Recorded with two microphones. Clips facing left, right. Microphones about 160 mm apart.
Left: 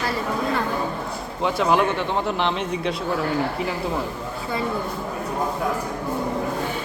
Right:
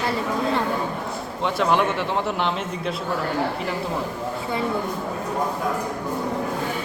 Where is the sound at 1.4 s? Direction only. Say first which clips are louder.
Left 1 dB; centre (ahead or behind).